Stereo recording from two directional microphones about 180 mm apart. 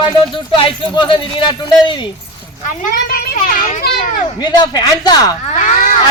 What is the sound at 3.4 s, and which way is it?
Speech, 45° left (ahead or behind).